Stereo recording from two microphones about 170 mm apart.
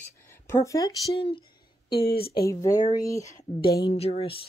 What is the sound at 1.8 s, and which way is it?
Speech, 30° left (ahead or behind).